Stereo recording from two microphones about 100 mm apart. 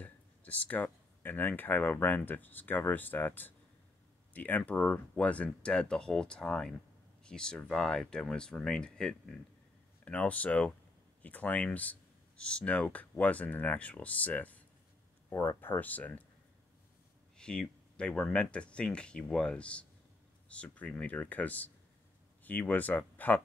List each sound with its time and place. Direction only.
0.0 s speech: 15° left (ahead or behind)
17.4 s speech: 10° left (ahead or behind)